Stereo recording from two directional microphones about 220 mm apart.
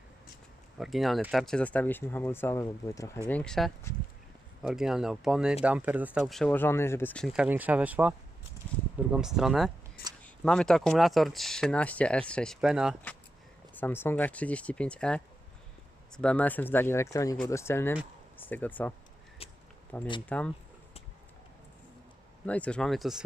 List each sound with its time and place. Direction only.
0.8 s speech: centre (ahead or behind)
9.1 s speech: centre (ahead or behind)
13.7 s speech: 10° left (ahead or behind)
19.4 s a sound: 25° left (ahead or behind)
20.2 s speech: 5° left (ahead or behind)
22.4 s speech: 5° left (ahead or behind)